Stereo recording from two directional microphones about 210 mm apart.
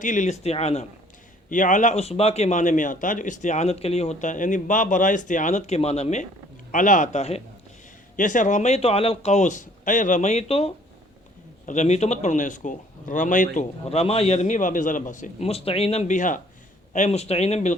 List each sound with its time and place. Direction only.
0.0 s a man's voice: 35° left (ahead or behind)